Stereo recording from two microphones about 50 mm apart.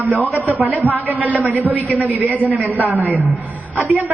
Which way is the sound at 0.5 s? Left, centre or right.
Right.